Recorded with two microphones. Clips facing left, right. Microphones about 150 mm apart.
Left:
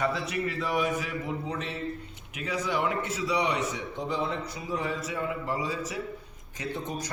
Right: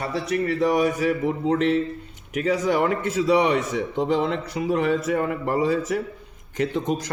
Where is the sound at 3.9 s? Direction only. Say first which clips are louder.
Right 10 dB; 90° right; by 6.0 s 55° right (ahead or behind).